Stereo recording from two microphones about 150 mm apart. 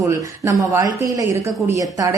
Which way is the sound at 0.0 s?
20° right (ahead or behind).